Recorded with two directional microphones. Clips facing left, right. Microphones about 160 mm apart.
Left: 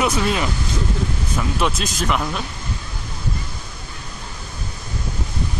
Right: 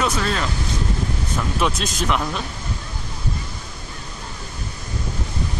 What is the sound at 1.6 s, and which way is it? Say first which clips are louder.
Speech: right 1 dB; centre (ahead or behind).